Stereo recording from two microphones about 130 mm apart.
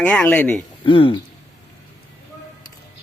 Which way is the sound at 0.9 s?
40° left (ahead or behind).